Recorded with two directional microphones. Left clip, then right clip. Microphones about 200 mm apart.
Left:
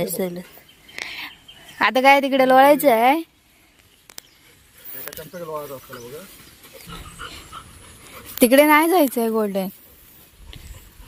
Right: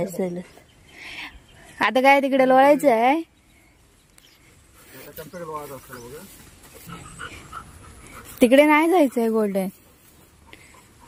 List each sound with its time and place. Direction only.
0.0 s speech: 10° right (ahead or behind)
1.0 s a sound: 15° right (ahead or behind)
1.8 s speech: 10° right (ahead or behind)
5.2 s speech: centre (ahead or behind)